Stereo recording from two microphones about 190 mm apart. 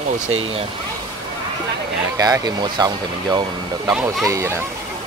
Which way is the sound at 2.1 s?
20° right (ahead or behind).